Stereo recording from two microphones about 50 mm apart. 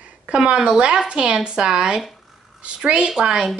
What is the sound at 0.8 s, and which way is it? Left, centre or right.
A woman's voice, centre.